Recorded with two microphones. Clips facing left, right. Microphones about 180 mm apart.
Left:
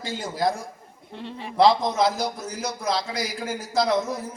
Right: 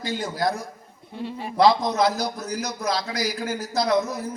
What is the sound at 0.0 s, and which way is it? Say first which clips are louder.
A man's voice: even; 25° left (ahead or behind).